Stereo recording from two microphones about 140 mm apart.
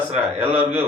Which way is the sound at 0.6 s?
10° right (ahead or behind).